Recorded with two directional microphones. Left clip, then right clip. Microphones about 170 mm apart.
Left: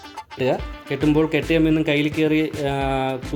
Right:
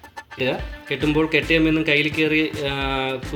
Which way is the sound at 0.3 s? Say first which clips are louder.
Left 2 dB; 65° left (ahead or behind).